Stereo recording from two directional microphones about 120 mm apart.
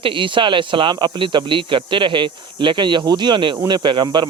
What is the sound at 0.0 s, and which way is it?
Speech, 45° right (ahead or behind).